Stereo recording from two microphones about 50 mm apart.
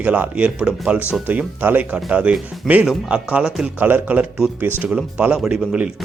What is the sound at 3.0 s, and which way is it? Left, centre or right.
Speech, right.